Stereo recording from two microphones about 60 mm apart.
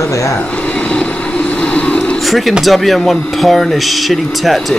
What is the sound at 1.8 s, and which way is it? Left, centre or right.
Vehicle, centre.